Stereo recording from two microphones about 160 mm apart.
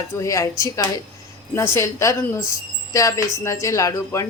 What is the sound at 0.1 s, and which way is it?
Speech, 20° left (ahead or behind).